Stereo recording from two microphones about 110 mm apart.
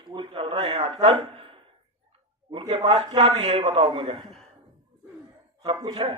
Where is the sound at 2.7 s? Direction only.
55° right (ahead or behind).